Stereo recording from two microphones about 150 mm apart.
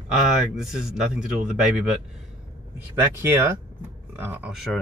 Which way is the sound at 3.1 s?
15° right (ahead or behind).